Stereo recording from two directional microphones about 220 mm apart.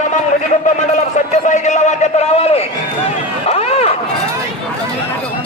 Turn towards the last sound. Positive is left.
turn(degrees=25)  # may be behind; listen again after turning